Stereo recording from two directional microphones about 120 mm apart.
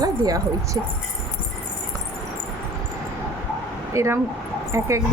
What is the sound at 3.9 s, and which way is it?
Speech, 25° right (ahead or behind).